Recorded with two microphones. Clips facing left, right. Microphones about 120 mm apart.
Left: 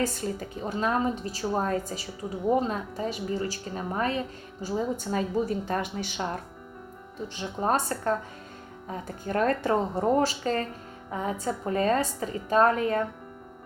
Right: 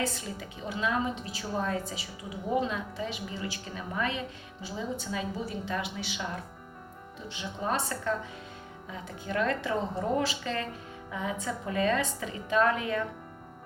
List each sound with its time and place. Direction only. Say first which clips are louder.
0.0 s a woman's voice: left 5 dB; 45° left (ahead or behind)